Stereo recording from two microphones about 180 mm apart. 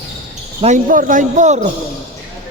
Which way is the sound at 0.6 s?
45° right (ahead or behind).